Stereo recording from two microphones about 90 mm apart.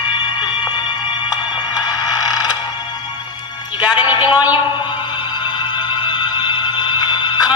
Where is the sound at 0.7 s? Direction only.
55° left (ahead or behind).